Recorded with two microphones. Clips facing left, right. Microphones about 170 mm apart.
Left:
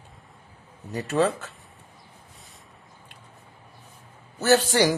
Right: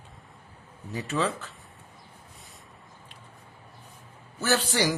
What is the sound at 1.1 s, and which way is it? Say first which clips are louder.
Speech: left 6 dB; 45° left (ahead or behind).